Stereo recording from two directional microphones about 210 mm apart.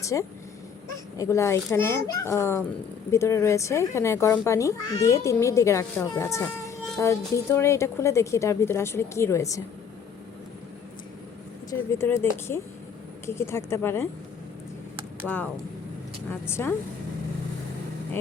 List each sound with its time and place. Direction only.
0.0 s speech: 15° left (ahead or behind)
11.7 s speech: 15° left (ahead or behind)
15.3 s speech: centre (ahead or behind)
16.3 s speech: 10° left (ahead or behind)